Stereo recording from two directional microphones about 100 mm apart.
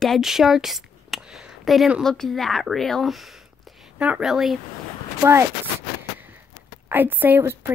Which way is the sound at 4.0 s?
15° right (ahead or behind).